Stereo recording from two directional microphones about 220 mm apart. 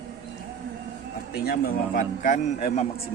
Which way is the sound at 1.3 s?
45° left (ahead or behind).